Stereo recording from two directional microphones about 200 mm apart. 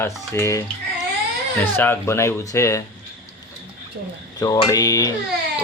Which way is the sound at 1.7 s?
10° left (ahead or behind).